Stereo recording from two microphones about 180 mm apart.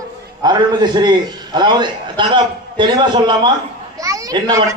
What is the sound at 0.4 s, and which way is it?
A man's voice, 25° right (ahead or behind).